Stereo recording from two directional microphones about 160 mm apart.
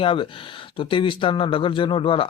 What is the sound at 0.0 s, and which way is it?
Speech, 35° left (ahead or behind).